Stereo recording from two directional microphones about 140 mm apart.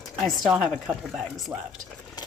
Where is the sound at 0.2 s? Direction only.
Centre (ahead or behind).